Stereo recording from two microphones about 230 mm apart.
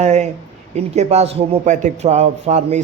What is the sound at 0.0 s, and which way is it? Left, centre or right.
A man's voice, right.